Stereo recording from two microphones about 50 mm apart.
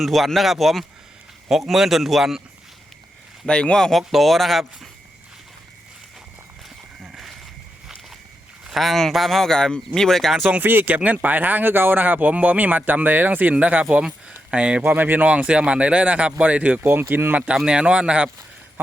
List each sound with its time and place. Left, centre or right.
0.0 s speech: centre
3.4 s speech: centre
3.9 s speech: centre
7.0 s a sound: centre
8.7 s speech: centre
10.6 s speech: right
14.9 s speech: right
15.3 s speech: right
16.8 s speech: right
17.7 s speech: right